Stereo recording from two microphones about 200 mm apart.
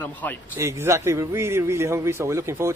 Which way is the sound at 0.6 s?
15° right (ahead or behind).